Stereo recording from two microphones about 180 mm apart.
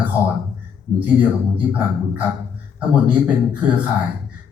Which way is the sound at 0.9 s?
10° right (ahead or behind).